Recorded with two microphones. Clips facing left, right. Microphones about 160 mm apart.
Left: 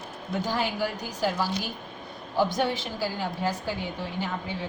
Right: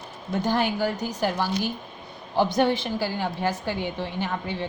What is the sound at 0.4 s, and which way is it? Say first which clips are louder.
A woman's voice: right 5 dB; 60° right (ahead or behind).